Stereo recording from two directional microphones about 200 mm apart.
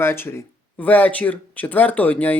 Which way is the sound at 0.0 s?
10° left (ahead or behind).